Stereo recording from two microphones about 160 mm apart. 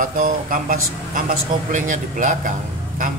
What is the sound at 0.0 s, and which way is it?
A man's voice, 60° right (ahead or behind).